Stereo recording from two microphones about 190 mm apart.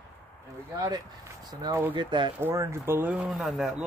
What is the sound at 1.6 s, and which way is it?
Speech, 15° right (ahead or behind).